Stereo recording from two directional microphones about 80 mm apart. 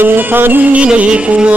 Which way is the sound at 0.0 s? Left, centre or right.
Right.